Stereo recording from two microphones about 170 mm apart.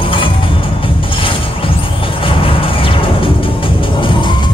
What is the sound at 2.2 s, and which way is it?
Music, 30° left (ahead or behind).